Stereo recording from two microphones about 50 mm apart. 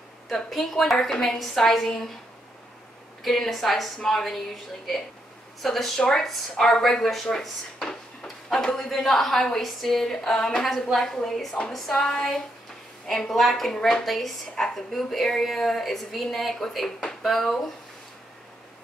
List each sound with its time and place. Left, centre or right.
0.3 s speech: centre
3.3 s speech: centre
5.6 s speech: centre
5.9 s speech: centre
13.7 s speech: centre
14.0 s speech: centre